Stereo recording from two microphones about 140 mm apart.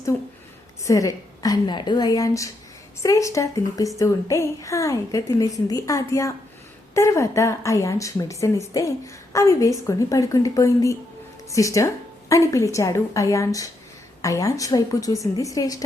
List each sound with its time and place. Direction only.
0.9 s a woman's voice: 25° left (ahead or behind)